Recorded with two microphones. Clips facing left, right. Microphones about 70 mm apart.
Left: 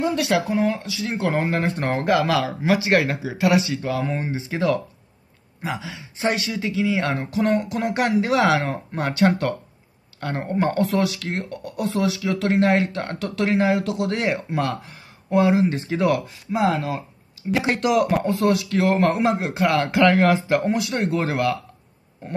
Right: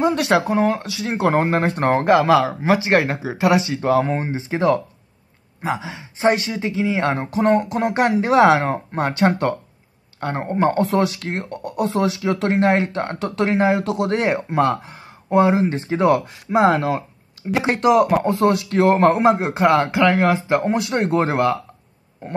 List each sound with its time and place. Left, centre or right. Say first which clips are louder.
0.0 s speech: right 4 dB; right
16.5 s speech: right 6 dB; right
17.5 s speech: right 2 dB; right
18.4 s speech: right 4 dB; right
19.9 s speech: even; centre
20.7 s speech: right 4 dB; right